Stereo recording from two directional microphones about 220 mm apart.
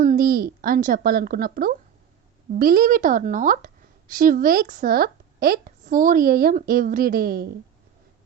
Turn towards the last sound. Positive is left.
turn(degrees=-45)  # may be behind; listen again after turning